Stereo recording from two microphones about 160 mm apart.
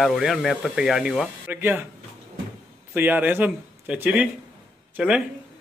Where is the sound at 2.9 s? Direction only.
10° right (ahead or behind).